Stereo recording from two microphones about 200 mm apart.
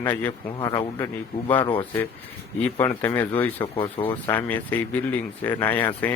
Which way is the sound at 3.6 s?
25° left (ahead or behind).